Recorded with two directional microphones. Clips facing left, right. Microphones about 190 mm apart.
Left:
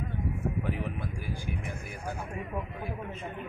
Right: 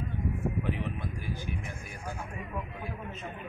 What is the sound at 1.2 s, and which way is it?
Vehicle, 10° left (ahead or behind).